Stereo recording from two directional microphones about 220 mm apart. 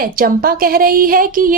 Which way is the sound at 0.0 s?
40° right (ahead or behind).